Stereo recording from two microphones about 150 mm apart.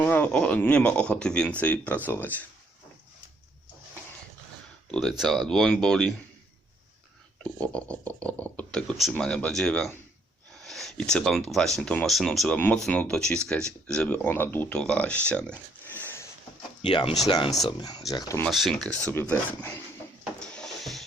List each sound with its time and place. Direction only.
0.0 s speech: 10° left (ahead or behind)
4.9 s speech: centre (ahead or behind)
7.6 s speech: 10° left (ahead or behind)
16.8 s speech: 30° left (ahead or behind)
18.4 s speech: centre (ahead or behind)
20.4 s a sound: 5° left (ahead or behind)